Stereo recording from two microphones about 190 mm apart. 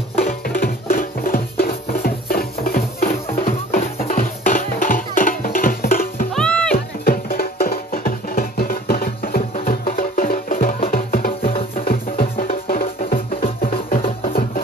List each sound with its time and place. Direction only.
0.3 s music: 45° left (ahead or behind)
6.3 s music: 5° left (ahead or behind)
7.1 s music: 50° left (ahead or behind)
14.2 s music: 50° left (ahead or behind)